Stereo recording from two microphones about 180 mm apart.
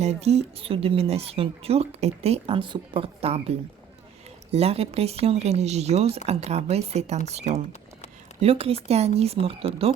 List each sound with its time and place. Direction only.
0.0 s speech: 35° right (ahead or behind)
4.5 s speech: 35° right (ahead or behind)